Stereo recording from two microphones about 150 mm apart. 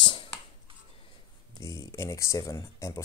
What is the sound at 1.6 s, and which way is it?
Speech, 20° left (ahead or behind).